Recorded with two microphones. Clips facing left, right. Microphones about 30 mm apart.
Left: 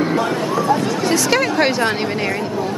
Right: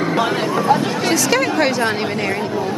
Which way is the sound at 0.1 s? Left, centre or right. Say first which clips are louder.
Right 1 dB; right.